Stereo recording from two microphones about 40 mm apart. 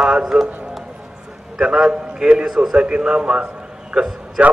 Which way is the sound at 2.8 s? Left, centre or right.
Right.